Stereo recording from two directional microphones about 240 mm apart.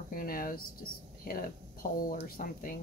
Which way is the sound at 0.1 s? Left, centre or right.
Left.